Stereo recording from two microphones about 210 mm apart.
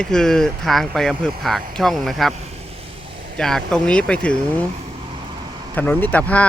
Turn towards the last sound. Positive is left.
turn(degrees=5)  # may be behind; listen again after turning